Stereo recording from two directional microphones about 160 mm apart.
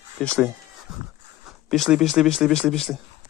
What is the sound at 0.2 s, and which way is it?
Speech, 5° left (ahead or behind).